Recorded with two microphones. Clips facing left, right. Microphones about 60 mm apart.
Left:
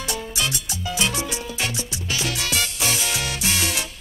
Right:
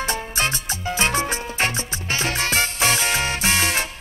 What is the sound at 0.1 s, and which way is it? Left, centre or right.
Music, right.